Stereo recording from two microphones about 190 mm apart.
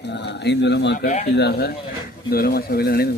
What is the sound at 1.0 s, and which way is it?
Speech, 35° left (ahead or behind).